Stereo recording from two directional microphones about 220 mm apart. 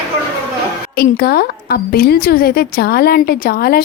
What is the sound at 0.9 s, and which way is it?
A woman's voice, 45° left (ahead or behind).